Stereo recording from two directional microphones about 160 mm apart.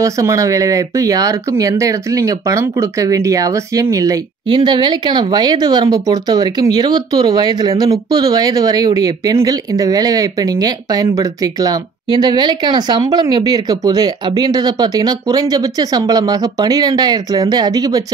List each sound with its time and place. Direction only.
0.0 s speech: 20° right (ahead or behind)